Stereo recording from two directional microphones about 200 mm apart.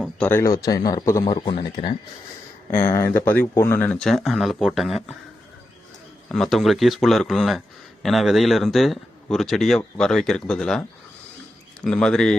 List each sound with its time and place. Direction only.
0.0 s a man's voice: 10° left (ahead or behind); by 1.9 s 25° left (ahead or behind)
2.7 s speech: 10° left (ahead or behind)
6.2 s speech: centre (ahead or behind)